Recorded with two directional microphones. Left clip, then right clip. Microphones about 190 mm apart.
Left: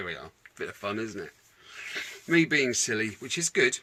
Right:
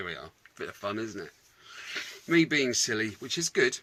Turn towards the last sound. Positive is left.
turn(degrees=0)  # may be behind; listen again after turning